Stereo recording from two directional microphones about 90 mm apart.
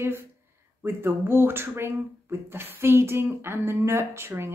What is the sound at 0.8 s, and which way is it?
A woman's voice, 25° right (ahead or behind).